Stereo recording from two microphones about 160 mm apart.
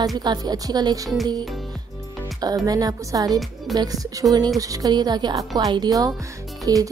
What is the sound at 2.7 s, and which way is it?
A woman's voice, 25° right (ahead or behind).